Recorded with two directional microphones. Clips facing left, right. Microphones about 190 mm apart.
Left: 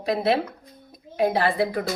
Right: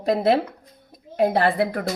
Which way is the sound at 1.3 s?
55° right (ahead or behind).